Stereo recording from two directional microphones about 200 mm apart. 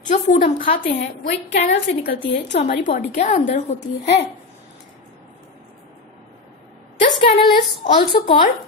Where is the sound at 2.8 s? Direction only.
40° left (ahead or behind).